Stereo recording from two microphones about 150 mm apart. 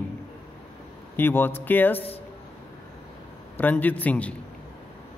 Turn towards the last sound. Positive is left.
turn(degrees=10)  # may be behind; listen again after turning